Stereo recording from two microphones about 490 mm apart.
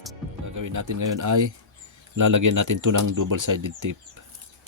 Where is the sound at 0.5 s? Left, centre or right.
Right.